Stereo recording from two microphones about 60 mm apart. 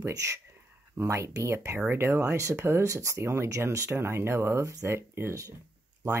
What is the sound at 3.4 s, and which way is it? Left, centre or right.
Speech, right.